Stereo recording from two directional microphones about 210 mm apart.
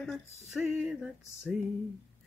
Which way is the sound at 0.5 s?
5° right (ahead or behind).